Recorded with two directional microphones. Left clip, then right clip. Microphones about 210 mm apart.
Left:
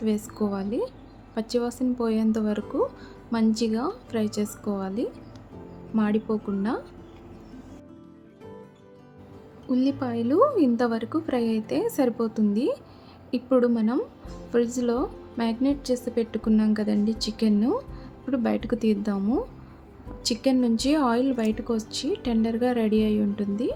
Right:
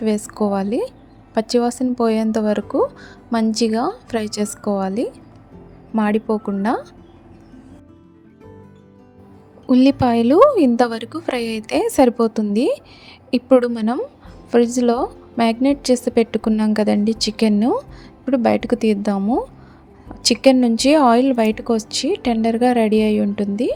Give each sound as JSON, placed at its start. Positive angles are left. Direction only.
{"t": 0.0, "sound": "a woman's voice", "side_deg": -30}
{"t": 9.6, "sound": "a woman's voice", "side_deg": -35}